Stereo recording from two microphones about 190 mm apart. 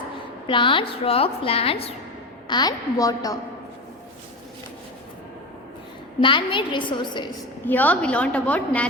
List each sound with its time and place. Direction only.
0.4 s a woman's voice: 25° left (ahead or behind)
6.2 s a woman's voice: 25° left (ahead or behind)
7.6 s a woman's voice: 10° left (ahead or behind)